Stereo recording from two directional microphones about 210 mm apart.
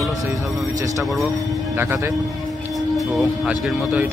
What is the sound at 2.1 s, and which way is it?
Speech, centre (ahead or behind).